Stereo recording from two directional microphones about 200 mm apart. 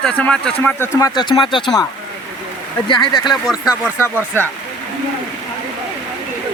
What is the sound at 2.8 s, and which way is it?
Speech, 20° left (ahead or behind).